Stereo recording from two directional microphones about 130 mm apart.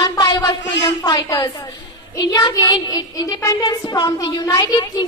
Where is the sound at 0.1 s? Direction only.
30° left (ahead or behind).